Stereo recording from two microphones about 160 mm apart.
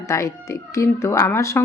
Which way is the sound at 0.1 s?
20° left (ahead or behind).